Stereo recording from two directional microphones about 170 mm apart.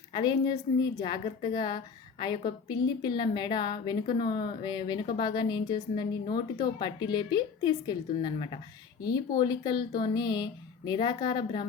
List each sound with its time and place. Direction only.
0.1 s a woman's voice: 25° left (ahead or behind)